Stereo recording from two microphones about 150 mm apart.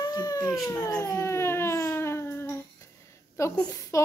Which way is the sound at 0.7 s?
20° left (ahead or behind).